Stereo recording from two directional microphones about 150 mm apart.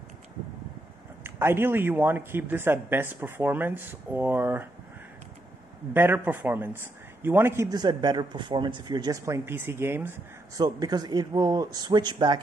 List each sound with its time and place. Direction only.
1.2 s a man's voice: 15° right (ahead or behind)
5.9 s a man's voice: 15° right (ahead or behind)
10.8 s a man's voice: 25° right (ahead or behind)